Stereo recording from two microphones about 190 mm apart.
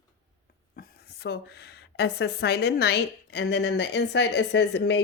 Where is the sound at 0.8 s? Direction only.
60° left (ahead or behind).